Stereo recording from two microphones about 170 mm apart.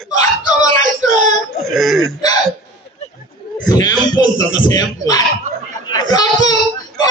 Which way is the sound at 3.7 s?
25° left (ahead or behind).